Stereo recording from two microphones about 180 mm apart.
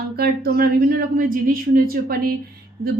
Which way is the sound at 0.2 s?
60° right (ahead or behind).